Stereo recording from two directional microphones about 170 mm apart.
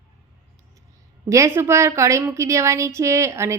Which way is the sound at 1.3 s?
15° right (ahead or behind).